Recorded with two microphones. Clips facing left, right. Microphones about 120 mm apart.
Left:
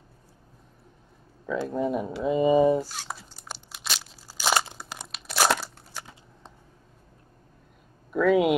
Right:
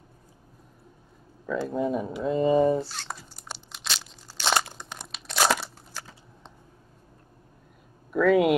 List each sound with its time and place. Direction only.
1.6 s speech: centre (ahead or behind)
3.7 s crunch: 5° left (ahead or behind)
4.7 s crumpling: 5° left (ahead or behind)
8.1 s speech: centre (ahead or behind)